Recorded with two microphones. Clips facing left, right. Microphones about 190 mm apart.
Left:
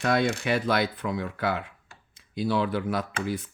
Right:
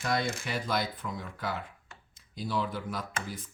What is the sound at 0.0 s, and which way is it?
Speech, 70° left (ahead or behind).